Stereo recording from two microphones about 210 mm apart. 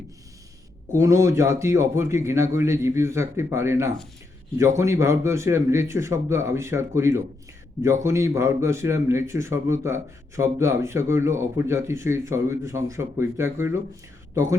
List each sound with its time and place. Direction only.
0.9 s speech: 15° right (ahead or behind)